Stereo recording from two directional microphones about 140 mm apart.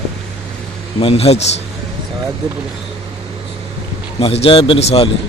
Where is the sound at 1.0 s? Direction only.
45° left (ahead or behind).